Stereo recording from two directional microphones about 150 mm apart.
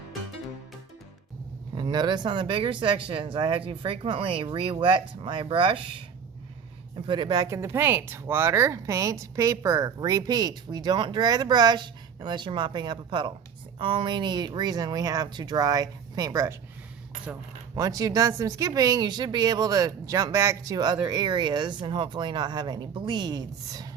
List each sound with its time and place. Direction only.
1.7 s speech: 30° right (ahead or behind)
7.1 s speech: 30° right (ahead or behind)
17.7 s speech: 25° right (ahead or behind)